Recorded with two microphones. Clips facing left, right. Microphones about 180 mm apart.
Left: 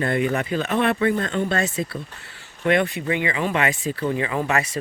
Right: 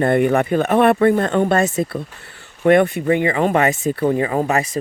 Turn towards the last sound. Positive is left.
turn(degrees=-35)  # may be behind; listen again after turning